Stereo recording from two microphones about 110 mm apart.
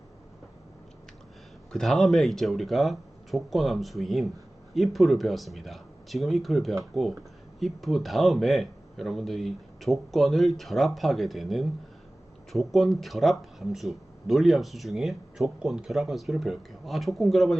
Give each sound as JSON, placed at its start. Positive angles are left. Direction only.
{"t": 1.7, "sound": "speech", "side_deg": 5}